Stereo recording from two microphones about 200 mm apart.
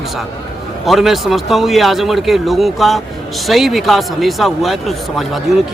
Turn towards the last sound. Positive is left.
turn(degrees=0)  # may be behind; listen again after turning